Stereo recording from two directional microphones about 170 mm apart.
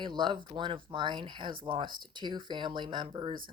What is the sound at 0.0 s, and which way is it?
Speech, 25° right (ahead or behind).